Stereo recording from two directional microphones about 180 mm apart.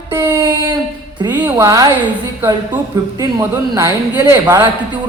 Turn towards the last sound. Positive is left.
turn(degrees=-10)  # may be behind; listen again after turning